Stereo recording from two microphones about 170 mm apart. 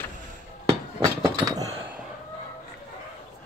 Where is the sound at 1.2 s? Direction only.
25° right (ahead or behind).